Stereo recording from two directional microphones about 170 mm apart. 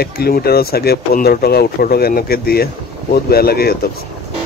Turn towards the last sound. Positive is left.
turn(degrees=65)  # may be behind; listen again after turning